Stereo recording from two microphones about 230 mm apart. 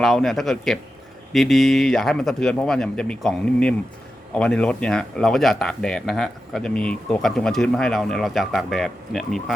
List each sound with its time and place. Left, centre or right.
0.0 s speech: centre